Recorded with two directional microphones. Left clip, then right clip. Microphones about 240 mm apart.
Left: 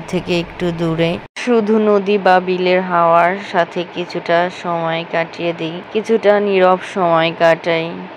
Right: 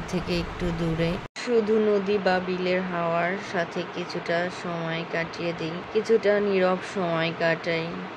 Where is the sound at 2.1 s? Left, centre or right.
Centre.